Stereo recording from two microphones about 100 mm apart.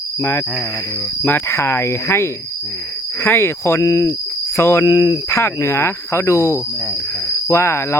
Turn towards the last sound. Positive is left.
turn(degrees=25)  # may be behind; listen again after turning